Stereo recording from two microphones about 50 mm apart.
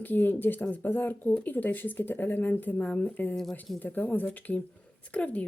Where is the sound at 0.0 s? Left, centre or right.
Left.